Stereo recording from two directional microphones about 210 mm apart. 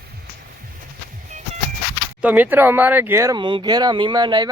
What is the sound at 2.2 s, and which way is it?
Speech, 5° right (ahead or behind).